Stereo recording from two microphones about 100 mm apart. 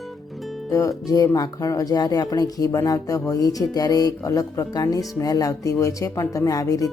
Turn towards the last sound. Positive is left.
turn(degrees=35)  # may be behind; listen again after turning